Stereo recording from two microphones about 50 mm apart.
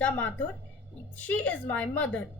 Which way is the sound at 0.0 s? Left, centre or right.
Left.